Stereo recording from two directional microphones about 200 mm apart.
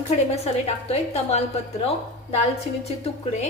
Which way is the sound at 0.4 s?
30° left (ahead or behind).